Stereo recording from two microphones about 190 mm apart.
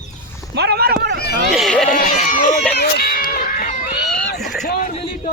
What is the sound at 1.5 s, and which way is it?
Speech, centre (ahead or behind).